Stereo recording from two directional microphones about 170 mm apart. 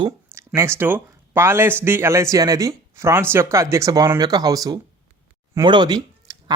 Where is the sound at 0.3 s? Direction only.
15° right (ahead or behind).